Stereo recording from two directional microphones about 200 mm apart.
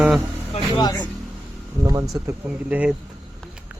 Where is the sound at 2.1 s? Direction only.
10° right (ahead or behind).